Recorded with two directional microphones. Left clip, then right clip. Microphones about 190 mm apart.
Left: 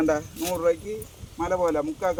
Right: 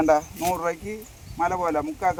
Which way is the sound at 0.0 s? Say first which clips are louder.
Right 4 dB; 30° right (ahead or behind).